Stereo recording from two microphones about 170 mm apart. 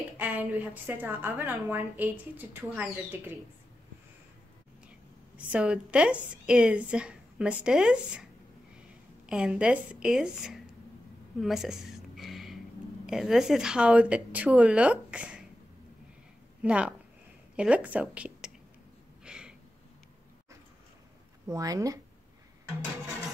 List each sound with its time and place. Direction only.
0.2 s a woman's voice: 10° right (ahead or behind)
5.5 s a woman's voice: 5° right (ahead or behind)
11.4 s a sound: centre (ahead or behind)
13.0 s a woman's voice: centre (ahead or behind)
16.6 s a woman's voice: 5° right (ahead or behind)
19.2 s a sound: 5° right (ahead or behind)
21.5 s speech: 20° right (ahead or behind)